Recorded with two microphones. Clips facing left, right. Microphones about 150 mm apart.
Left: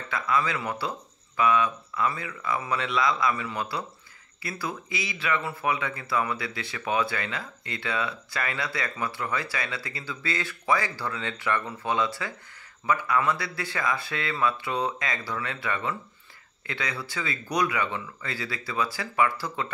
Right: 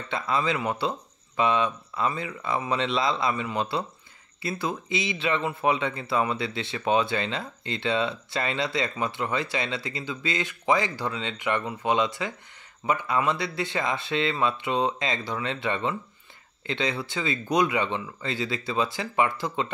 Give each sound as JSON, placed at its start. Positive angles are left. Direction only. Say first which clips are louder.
{"t": 0.1, "sound": "speech", "louder": "right 1 dB", "side_deg": -25}